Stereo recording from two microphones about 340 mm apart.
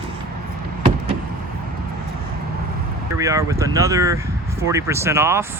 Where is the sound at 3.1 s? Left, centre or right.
Centre.